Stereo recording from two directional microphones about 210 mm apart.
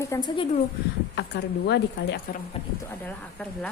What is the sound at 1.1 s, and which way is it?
A woman's voice, 55° left (ahead or behind).